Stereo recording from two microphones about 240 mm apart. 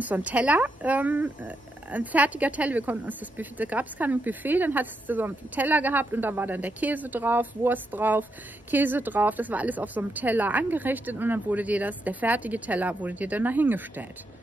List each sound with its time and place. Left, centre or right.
0.0 s speech: centre